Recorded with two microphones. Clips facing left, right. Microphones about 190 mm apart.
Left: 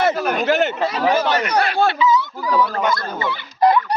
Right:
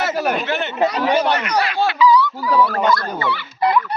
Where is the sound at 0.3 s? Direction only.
40° left (ahead or behind).